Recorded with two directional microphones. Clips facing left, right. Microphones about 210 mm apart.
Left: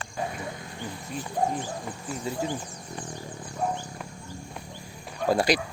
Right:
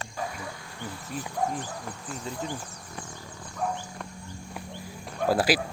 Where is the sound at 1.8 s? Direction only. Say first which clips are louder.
Left 4 dB; 5° left (ahead or behind).